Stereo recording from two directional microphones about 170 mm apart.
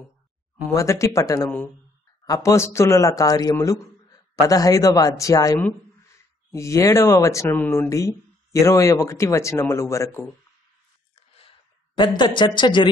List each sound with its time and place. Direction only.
0.7 s speech: 15° left (ahead or behind)
12.0 s speech: 25° left (ahead or behind)